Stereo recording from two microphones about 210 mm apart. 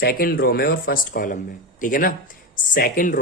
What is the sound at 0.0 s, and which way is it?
Speech, 45° left (ahead or behind).